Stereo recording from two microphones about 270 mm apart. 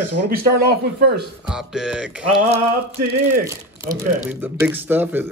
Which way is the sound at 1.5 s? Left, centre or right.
Centre.